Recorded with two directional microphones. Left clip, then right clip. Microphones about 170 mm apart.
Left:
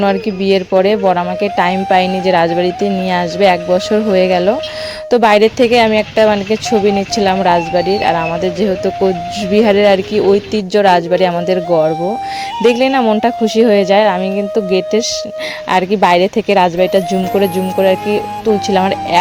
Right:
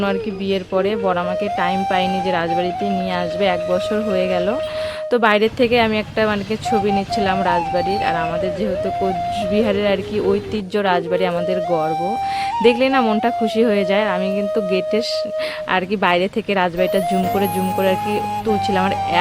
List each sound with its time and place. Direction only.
0.0 s speech: 30° left (ahead or behind)
9.5 s speech: 35° left (ahead or behind)
12.6 s speech: 25° left (ahead or behind)